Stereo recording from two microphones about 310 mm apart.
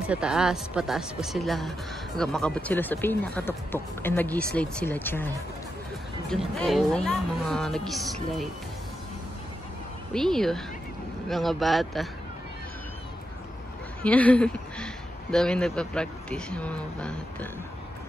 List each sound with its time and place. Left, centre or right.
0.0 s speech: centre
6.3 s speech: centre
10.1 s speech: centre
14.0 s speech: centre